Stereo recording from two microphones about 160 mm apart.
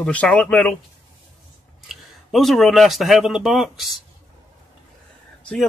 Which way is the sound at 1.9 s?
Centre (ahead or behind).